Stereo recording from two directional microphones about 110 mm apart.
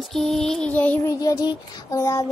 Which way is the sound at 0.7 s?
15° left (ahead or behind).